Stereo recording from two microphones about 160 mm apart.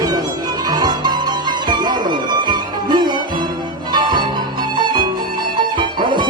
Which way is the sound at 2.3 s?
25° right (ahead or behind).